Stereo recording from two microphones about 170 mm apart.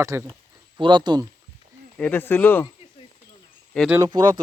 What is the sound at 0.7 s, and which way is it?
Speech, 25° right (ahead or behind).